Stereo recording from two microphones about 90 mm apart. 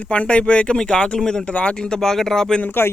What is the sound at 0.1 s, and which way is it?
Speech, 10° left (ahead or behind).